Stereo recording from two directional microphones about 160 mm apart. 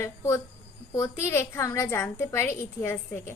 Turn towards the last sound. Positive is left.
turn(degrees=15)  # may be behind; listen again after turning